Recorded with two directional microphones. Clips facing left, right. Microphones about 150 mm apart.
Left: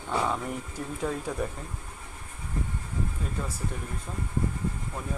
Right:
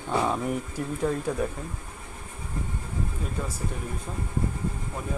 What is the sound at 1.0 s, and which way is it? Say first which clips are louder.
Speech: right 4 dB; centre (ahead or behind).